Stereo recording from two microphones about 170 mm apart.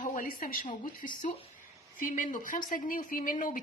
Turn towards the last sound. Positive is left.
turn(degrees=50)  # may be behind; listen again after turning